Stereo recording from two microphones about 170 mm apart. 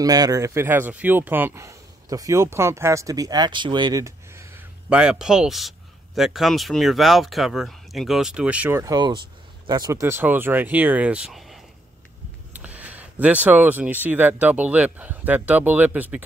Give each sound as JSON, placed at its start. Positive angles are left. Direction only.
{"t": 0.0, "sound": "speech", "side_deg": -20}
{"t": 4.8, "sound": "a man's voice", "side_deg": -5}